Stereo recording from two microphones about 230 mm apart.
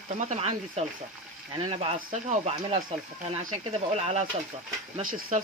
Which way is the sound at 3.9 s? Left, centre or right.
Right.